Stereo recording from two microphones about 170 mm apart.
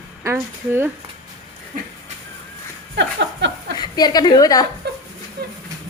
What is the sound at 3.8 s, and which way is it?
Speech, 25° left (ahead or behind).